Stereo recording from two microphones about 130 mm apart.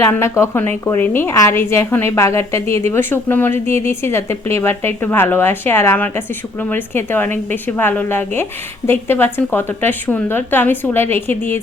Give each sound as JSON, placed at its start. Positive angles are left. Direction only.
{"t": 0.0, "sound": "a woman's voice", "side_deg": 20}